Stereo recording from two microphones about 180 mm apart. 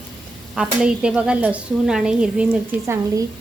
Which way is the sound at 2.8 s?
15° right (ahead or behind).